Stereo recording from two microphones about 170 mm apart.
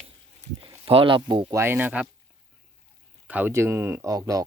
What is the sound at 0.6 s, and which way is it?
Speech, 30° right (ahead or behind).